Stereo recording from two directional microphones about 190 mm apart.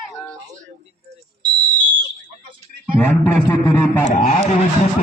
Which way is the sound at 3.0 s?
10° left (ahead or behind).